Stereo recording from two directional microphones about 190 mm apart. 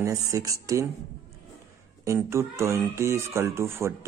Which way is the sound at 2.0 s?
15° right (ahead or behind).